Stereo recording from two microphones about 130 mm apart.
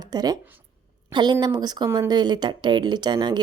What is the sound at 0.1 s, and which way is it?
A woman's voice, 30° right (ahead or behind).